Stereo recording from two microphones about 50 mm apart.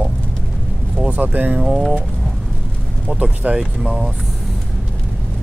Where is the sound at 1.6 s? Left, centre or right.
Centre.